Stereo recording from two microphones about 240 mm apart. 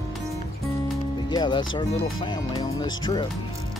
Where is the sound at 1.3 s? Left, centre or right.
Centre.